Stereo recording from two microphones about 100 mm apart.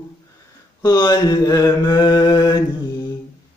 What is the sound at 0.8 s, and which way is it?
Mantra, 40° left (ahead or behind).